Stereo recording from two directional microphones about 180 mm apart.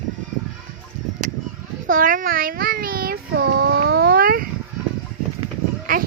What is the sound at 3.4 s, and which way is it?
Babbling, 55° right (ahead or behind).